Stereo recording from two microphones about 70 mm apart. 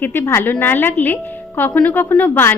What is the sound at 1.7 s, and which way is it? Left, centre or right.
Speech, centre.